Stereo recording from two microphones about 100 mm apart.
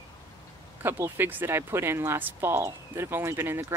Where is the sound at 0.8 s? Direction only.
20° right (ahead or behind).